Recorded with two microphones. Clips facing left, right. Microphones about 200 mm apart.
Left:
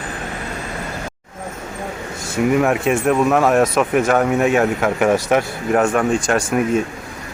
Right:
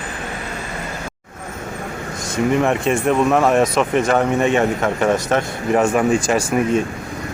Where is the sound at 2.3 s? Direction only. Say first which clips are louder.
Left 1 dB; 5° left (ahead or behind).